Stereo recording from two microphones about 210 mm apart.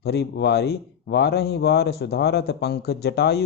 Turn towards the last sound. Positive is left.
turn(degrees=50)  # may be behind; listen again after turning